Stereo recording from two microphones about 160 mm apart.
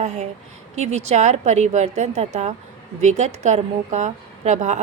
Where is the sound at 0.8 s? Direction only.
45° right (ahead or behind).